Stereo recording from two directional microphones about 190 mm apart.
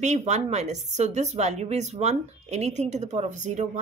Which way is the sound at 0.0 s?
35° right (ahead or behind).